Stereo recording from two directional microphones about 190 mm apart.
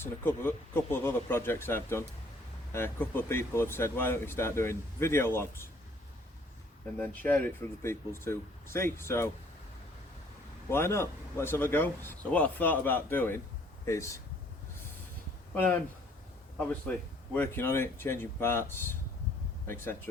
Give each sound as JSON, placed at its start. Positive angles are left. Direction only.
{"t": 0.0, "sound": "speech", "side_deg": 10}
{"t": 7.0, "sound": "speech", "side_deg": 10}
{"t": 10.7, "sound": "speech", "side_deg": 15}
{"t": 15.5, "sound": "speech", "side_deg": 10}